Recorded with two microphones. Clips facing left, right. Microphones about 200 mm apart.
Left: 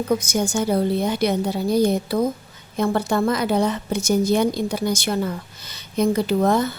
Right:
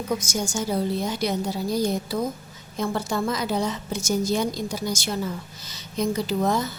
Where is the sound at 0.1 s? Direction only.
60° left (ahead or behind).